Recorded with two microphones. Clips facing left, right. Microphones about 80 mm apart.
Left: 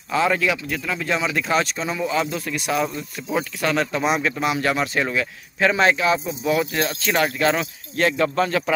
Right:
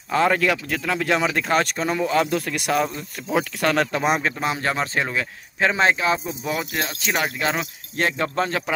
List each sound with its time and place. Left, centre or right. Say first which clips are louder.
0.1 s speech: right 1 dB; right
4.3 s speech: left 2 dB; right
6.6 s speech: left 4 dB; centre